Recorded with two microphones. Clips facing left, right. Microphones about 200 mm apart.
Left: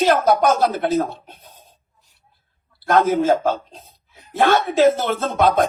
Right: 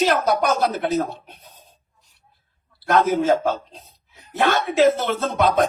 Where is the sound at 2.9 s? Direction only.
50° left (ahead or behind).